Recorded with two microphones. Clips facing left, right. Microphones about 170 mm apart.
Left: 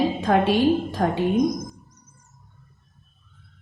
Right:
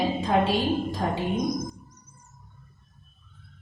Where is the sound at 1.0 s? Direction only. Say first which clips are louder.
Left 5 dB; 90° left.